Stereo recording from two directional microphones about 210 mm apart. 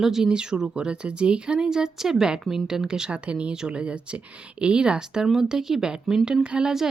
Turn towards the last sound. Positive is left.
turn(degrees=-5)  # may be behind; listen again after turning